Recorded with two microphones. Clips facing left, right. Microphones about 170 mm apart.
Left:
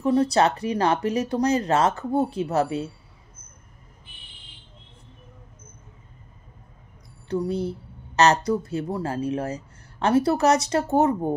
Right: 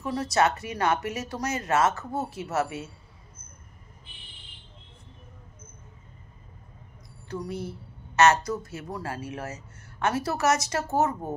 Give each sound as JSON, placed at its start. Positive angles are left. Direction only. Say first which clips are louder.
{"t": 0.0, "sound": "speech", "louder": "left 5 dB", "side_deg": 30}
{"t": 7.2, "sound": "speech", "louder": "left 8 dB", "side_deg": 30}